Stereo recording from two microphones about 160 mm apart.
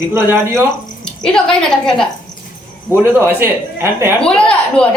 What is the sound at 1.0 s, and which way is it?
A woman's voice, 5° left (ahead or behind).